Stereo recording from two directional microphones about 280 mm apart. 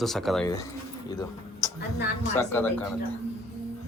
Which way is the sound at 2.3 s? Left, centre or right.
Centre.